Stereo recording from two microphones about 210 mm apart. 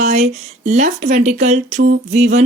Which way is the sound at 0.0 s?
35° right (ahead or behind).